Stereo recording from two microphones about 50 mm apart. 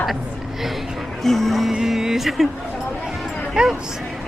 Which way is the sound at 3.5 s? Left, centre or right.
Centre.